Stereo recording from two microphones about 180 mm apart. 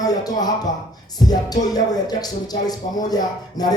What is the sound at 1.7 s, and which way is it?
Speech, 20° left (ahead or behind).